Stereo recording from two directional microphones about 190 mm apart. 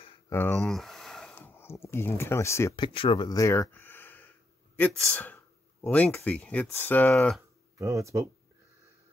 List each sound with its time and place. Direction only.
0.3 s speech: 10° left (ahead or behind)
0.6 s a sound: centre (ahead or behind)
1.4 s speech: 15° left (ahead or behind)
2.7 s speech: 25° left (ahead or behind); by 7.4 s 5° left (ahead or behind)
7.8 s speech: 15° right (ahead or behind)